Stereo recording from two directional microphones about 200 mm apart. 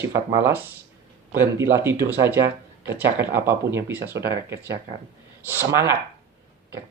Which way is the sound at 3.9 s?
55° right (ahead or behind).